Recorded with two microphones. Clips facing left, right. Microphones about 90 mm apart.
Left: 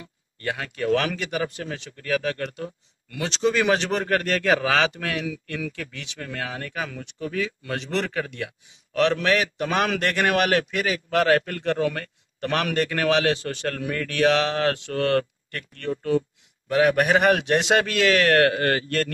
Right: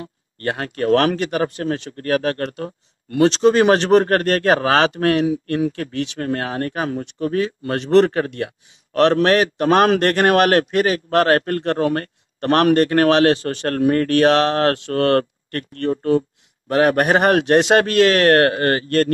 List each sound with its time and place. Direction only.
0.0 s speech: 50° right (ahead or behind)